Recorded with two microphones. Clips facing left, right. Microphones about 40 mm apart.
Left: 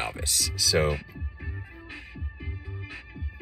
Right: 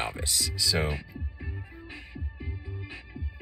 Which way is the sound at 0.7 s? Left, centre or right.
Left.